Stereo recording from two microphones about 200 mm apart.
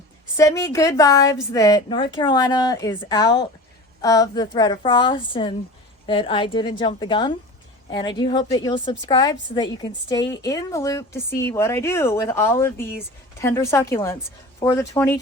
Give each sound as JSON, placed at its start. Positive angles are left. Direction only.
{"t": 0.3, "sound": "a woman's voice", "side_deg": 15}